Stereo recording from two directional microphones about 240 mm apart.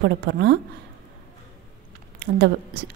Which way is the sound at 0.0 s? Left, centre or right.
Right.